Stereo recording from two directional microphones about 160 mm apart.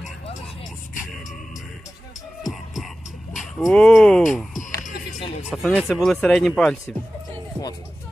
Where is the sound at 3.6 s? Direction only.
5° left (ahead or behind).